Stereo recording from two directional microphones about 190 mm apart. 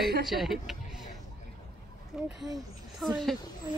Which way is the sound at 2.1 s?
5° right (ahead or behind).